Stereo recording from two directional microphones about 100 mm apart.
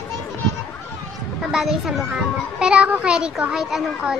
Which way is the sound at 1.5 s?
5° right (ahead or behind).